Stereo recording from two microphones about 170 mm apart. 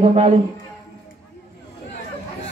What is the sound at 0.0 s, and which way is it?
Speech, 40° right (ahead or behind).